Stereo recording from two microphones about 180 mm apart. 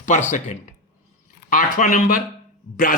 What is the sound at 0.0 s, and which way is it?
A man's voice, 45° left (ahead or behind).